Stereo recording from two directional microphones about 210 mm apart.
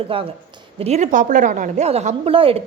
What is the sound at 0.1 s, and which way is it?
A woman's voice, 25° right (ahead or behind).